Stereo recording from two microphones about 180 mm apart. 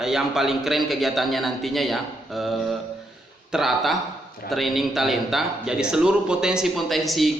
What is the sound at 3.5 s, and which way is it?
A man's voice, centre (ahead or behind).